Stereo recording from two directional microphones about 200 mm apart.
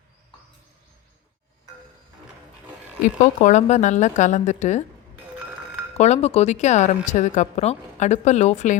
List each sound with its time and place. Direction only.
3.2 s speech: 35° left (ahead or behind)
6.0 s speech: 30° left (ahead or behind)